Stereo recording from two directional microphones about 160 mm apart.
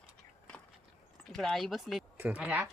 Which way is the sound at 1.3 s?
Centre (ahead or behind).